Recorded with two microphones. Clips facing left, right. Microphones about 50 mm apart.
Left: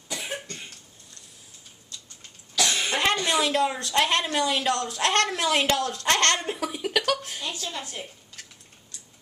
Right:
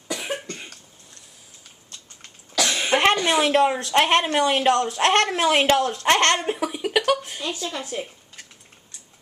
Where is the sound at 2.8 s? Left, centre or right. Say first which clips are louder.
Right 8 dB; right.